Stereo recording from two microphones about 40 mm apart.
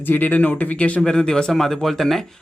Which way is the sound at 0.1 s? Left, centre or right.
Left.